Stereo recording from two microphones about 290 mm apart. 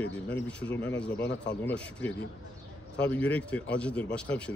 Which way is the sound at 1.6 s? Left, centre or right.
Centre.